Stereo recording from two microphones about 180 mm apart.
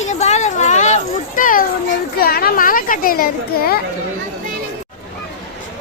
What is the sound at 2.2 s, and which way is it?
Speech, 55° left (ahead or behind).